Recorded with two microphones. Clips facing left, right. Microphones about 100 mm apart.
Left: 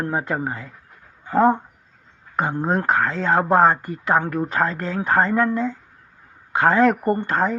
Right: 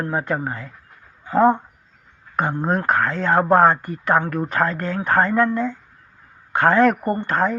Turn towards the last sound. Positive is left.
turn(degrees=25)  # may be behind; listen again after turning